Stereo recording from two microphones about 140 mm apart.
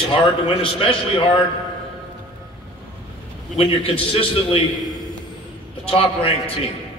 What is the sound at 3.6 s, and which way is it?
A man's voice, 45° left (ahead or behind).